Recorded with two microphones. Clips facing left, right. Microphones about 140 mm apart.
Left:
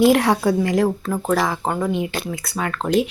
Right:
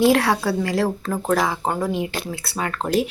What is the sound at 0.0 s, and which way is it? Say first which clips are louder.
A woman's voice: left 2 dB; 20° left (ahead or behind).